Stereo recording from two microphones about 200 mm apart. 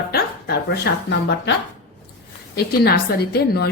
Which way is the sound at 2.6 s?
55° left (ahead or behind).